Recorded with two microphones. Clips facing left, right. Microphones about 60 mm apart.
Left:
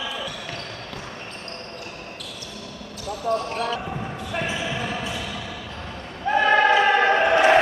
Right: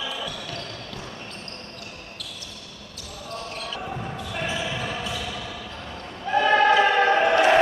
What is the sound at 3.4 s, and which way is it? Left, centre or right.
Basketball bounce, left.